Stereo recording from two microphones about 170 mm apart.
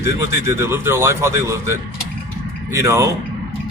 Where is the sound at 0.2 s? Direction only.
15° right (ahead or behind).